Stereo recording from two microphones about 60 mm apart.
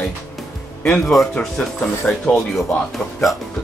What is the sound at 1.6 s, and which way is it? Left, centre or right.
Speech, centre.